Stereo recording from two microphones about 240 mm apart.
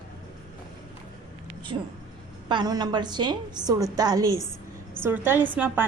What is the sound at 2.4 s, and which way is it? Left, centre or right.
A woman's voice, centre.